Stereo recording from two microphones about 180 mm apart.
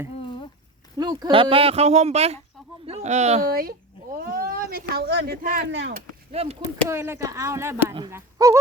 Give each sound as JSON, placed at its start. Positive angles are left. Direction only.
{"t": 0.9, "sound": "speech", "side_deg": -20}
{"t": 3.5, "sound": "speech", "side_deg": -55}
{"t": 5.6, "sound": "speech", "side_deg": -75}
{"t": 6.3, "sound": "speech", "side_deg": -35}
{"t": 6.8, "sound": "speech", "side_deg": -15}